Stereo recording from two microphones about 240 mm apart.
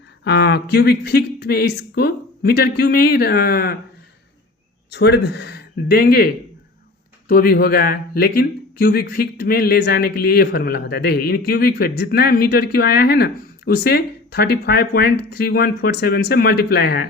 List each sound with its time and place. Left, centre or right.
0.3 s speech: left
4.9 s speech: left